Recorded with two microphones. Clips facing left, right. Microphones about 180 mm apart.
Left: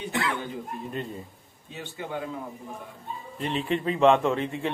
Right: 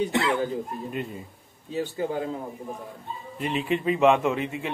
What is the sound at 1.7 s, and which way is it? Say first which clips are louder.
Speech: right 7 dB; 35° right (ahead or behind).